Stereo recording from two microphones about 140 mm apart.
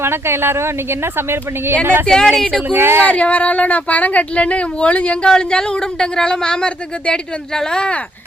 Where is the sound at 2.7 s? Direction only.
15° right (ahead or behind).